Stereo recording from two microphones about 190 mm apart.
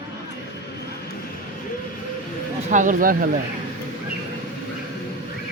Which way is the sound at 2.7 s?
45° right (ahead or behind).